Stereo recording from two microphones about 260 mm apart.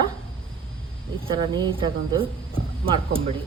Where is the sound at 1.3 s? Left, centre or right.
Centre.